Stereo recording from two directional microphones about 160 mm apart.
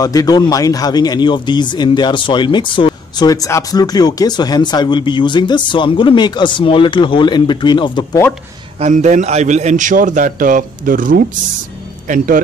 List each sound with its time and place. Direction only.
0.0 s speech: 25° left (ahead or behind)
8.7 s a man's voice: 45° right (ahead or behind)